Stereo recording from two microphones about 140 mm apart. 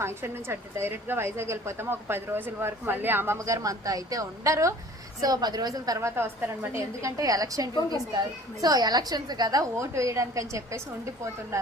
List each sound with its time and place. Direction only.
0.0 s a woman's voice: 15° right (ahead or behind)